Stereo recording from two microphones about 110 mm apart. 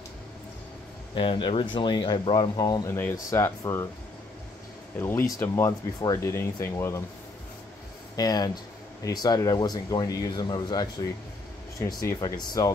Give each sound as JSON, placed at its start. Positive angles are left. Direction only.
{"t": 1.1, "sound": "speech", "side_deg": 50}
{"t": 2.9, "sound": "speech", "side_deg": 15}
{"t": 3.2, "sound": "speech", "side_deg": 30}
{"t": 4.9, "sound": "speech", "side_deg": 20}
{"t": 6.1, "sound": "speech", "side_deg": 25}
{"t": 8.2, "sound": "speech", "side_deg": 35}